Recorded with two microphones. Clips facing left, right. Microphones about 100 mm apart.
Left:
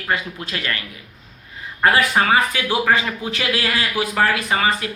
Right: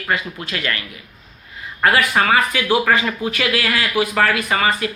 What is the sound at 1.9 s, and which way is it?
Speech, 25° left (ahead or behind).